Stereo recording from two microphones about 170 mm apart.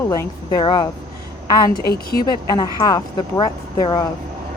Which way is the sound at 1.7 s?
65° left (ahead or behind).